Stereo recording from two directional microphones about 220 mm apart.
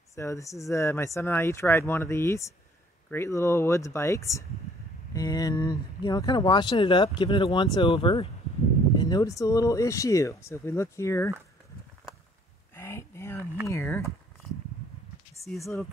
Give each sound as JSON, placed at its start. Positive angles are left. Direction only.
{"t": 0.1, "sound": "speech", "side_deg": 15}
{"t": 12.7, "sound": "a sound", "side_deg": 10}
{"t": 13.7, "sound": "speech", "side_deg": 10}
{"t": 15.4, "sound": "speech", "side_deg": 0}